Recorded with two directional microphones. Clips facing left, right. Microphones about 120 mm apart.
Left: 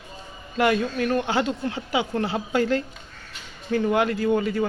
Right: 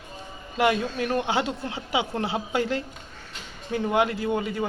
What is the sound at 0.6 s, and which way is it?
A man's voice, 20° right (ahead or behind).